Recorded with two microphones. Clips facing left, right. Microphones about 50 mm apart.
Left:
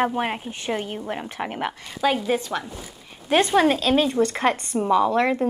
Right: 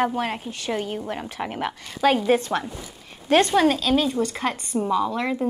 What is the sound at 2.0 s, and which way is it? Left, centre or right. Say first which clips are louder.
Speech: right 3 dB; right.